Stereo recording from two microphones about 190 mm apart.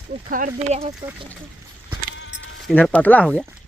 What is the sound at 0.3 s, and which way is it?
Speech, 40° right (ahead or behind).